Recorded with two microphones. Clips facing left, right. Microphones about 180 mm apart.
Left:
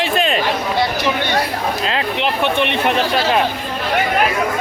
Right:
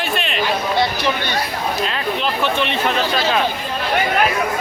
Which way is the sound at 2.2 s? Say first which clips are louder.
Left 2 dB; 60° left (ahead or behind).